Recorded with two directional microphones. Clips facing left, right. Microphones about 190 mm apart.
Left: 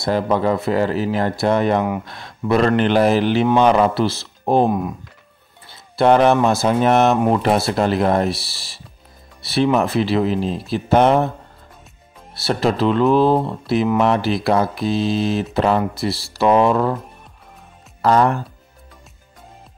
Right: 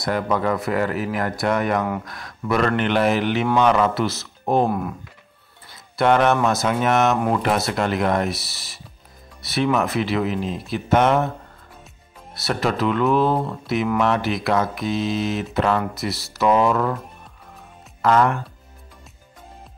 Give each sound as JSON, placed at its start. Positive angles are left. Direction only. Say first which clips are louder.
{"t": 0.0, "sound": "speech", "louder": "left 4 dB", "side_deg": 30}
{"t": 4.6, "sound": "speech", "louder": "left 4 dB", "side_deg": 20}
{"t": 5.7, "sound": "speech", "louder": "left 4 dB", "side_deg": 30}
{"t": 12.4, "sound": "speech", "louder": "left 4 dB", "side_deg": 30}
{"t": 18.0, "sound": "speech", "louder": "left 2 dB", "side_deg": 35}